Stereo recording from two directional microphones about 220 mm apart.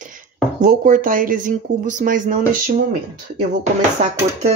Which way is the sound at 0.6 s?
35° right (ahead or behind).